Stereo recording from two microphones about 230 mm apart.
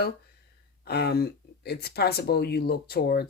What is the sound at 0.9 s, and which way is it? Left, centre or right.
Speech, left.